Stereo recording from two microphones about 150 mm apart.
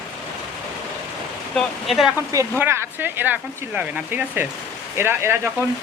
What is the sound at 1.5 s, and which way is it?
Speech, centre (ahead or behind).